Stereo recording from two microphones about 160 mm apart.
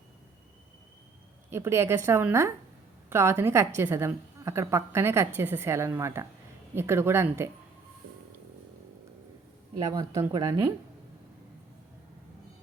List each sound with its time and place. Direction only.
1.5 s a woman's voice: 15° right (ahead or behind)
9.9 s speech: 25° right (ahead or behind)